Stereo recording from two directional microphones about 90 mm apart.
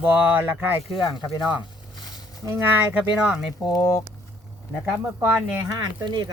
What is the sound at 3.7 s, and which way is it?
Speech, 40° left (ahead or behind).